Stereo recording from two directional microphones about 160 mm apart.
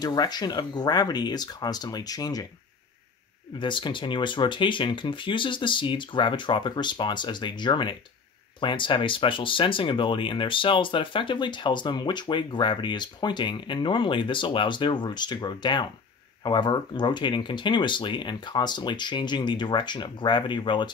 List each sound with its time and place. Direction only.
0.0 s speech: 25° left (ahead or behind)
3.5 s speech: 30° left (ahead or behind)